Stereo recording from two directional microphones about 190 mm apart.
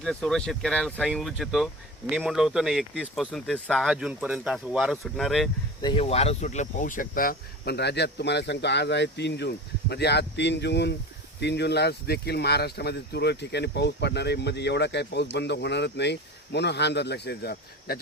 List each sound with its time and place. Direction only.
0.0 s speech: 5° left (ahead or behind)
5.8 s speech: 25° left (ahead or behind); by 18.0 s 55° left (ahead or behind)